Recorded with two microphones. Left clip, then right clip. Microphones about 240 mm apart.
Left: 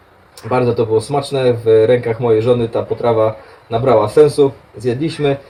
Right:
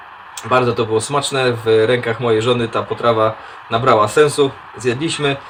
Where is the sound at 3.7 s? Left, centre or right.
Right.